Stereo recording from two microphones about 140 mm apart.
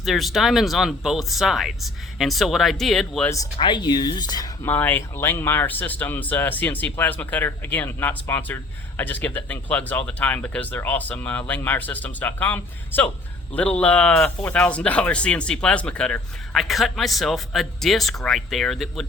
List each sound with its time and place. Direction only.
0.0 s speech: centre (ahead or behind)
3.2 s speech: 25° left (ahead or behind)
4.6 s speech: 15° left (ahead or behind)